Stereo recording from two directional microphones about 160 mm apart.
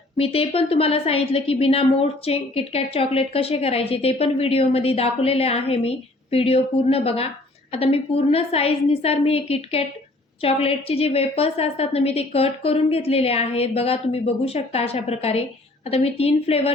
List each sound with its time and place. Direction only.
0.2 s a woman's voice: 35° left (ahead or behind)